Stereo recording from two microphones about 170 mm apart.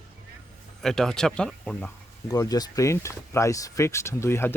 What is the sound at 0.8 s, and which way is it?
Speech, 5° left (ahead or behind).